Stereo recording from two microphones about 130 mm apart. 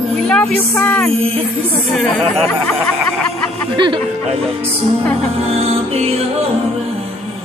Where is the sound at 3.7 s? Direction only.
35° right (ahead or behind).